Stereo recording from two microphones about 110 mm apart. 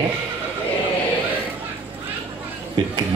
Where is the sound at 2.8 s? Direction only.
50° right (ahead or behind).